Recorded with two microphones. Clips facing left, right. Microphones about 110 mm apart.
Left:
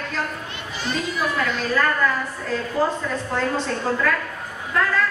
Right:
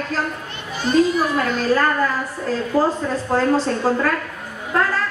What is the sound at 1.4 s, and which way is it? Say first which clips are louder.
A woman's voice: right 4 dB; 40° right (ahead or behind).